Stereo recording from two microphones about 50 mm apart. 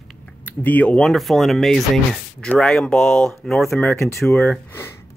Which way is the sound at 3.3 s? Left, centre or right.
Centre.